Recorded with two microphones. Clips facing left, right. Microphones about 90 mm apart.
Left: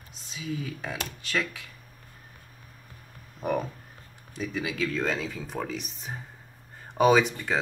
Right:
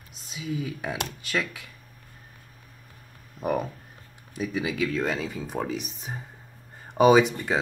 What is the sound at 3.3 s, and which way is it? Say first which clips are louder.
Speech: right 1 dB; 5° right (ahead or behind).